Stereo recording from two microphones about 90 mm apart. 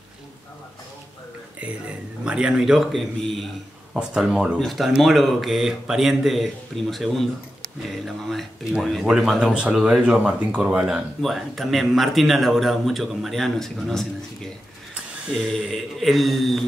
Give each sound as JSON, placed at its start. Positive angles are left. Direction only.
{"t": 1.6, "sound": "speech", "side_deg": -15}
{"t": 11.1, "sound": "speech", "side_deg": 0}